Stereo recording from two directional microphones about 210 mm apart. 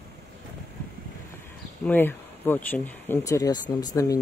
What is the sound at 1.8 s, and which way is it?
Speech, 10° left (ahead or behind).